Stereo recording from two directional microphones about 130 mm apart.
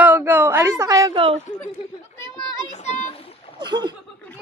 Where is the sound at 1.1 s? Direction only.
45° right (ahead or behind).